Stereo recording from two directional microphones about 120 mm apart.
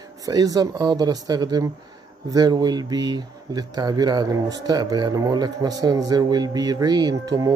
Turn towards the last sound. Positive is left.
turn(degrees=-35)  # may be behind; listen again after turning